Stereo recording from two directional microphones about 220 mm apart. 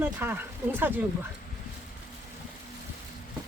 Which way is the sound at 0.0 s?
10° right (ahead or behind).